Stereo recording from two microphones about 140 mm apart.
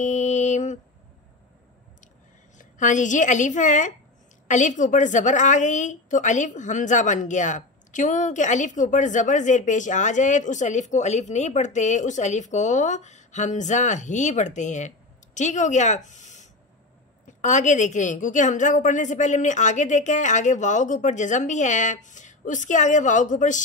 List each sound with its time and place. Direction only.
0.0 s mantra: 60° left (ahead or behind)
2.6 s a woman's voice: 65° left (ahead or behind)